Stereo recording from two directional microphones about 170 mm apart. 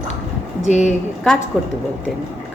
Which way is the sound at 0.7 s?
40° left (ahead or behind).